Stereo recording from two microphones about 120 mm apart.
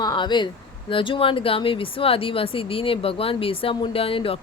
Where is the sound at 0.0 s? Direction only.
35° left (ahead or behind).